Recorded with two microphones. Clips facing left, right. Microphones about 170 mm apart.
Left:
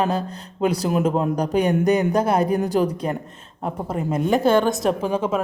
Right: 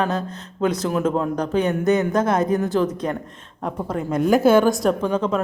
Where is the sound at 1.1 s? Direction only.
15° left (ahead or behind).